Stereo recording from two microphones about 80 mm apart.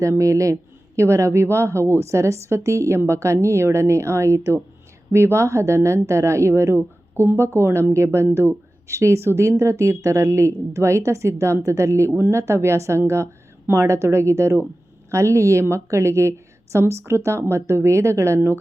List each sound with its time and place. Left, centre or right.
0.0 s a woman's voice: right